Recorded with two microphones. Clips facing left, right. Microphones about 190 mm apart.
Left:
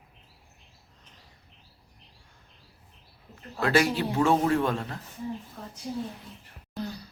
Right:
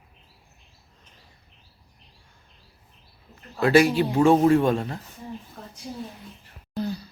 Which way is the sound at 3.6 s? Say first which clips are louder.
Right 6 dB; 10° right (ahead or behind).